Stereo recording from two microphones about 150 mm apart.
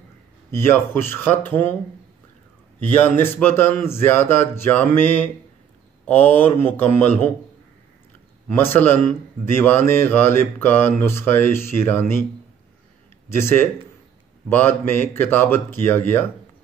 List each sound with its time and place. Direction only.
0.5 s speech: 15° left (ahead or behind)
3.0 s speech: 15° left (ahead or behind)
8.5 s speech: 15° left (ahead or behind)
13.3 s speech: 15° left (ahead or behind)